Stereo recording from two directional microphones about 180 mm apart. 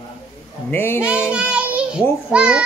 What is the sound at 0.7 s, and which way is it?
Speech, 10° left (ahead or behind).